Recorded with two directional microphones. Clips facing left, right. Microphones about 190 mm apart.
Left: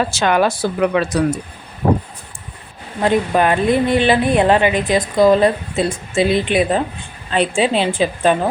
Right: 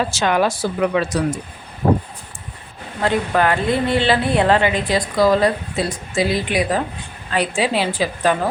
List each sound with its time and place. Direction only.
0.1 s speech: 60° left (ahead or behind)
3.0 s a woman's voice: 20° left (ahead or behind)